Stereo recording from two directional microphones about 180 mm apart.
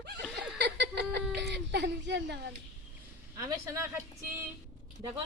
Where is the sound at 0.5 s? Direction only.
70° right (ahead or behind).